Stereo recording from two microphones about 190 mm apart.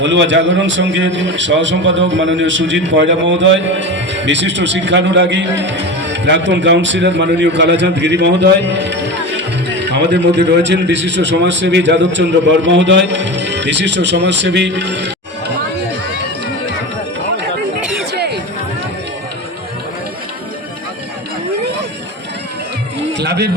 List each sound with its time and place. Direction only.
0.0 s a man's voice: 70° right (ahead or behind)
17.7 s chatter: 5° right (ahead or behind)
18.1 s chatter: 60° right (ahead or behind)
23.1 s a sound: 65° right (ahead or behind)